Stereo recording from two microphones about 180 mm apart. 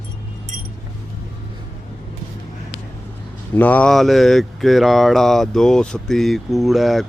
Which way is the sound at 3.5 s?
10° left (ahead or behind).